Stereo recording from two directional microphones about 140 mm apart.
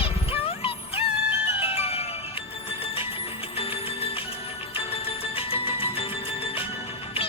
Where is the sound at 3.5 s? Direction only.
45° left (ahead or behind).